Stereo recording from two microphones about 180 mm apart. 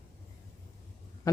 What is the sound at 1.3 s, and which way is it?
Speech, 20° left (ahead or behind).